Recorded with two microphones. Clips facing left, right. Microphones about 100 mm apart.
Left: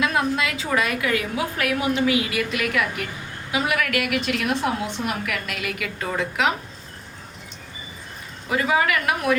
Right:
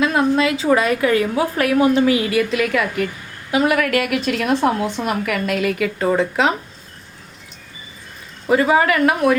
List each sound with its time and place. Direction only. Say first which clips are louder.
0.0 s a woman's voice: right 6 dB; 30° right (ahead or behind)
8.4 s a woman's voice: right 6 dB; 40° right (ahead or behind)